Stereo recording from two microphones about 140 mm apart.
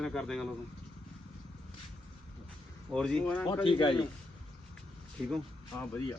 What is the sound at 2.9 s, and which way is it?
Speech, 5° left (ahead or behind).